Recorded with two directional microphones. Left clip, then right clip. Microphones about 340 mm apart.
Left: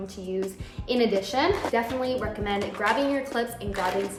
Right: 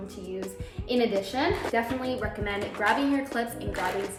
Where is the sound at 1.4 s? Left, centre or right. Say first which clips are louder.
Left 3 dB; centre.